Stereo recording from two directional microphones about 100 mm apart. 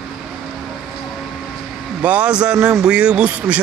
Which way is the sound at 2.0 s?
10° right (ahead or behind).